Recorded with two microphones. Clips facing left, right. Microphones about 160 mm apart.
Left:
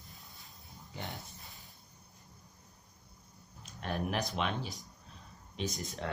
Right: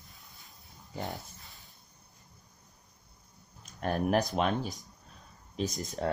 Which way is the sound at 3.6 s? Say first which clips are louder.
Right 6 dB; 45° right (ahead or behind).